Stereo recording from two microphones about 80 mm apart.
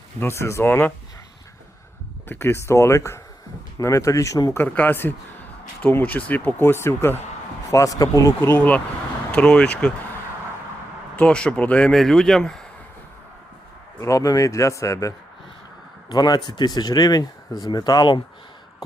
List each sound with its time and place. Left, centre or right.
0.2 s speech: left
0.7 s speech: left
2.3 s speech: left
4.5 s speech: left
7.7 s speech: left
8.4 s speech: left
11.2 s speech: centre
14.0 s speech: left
16.0 s speech: left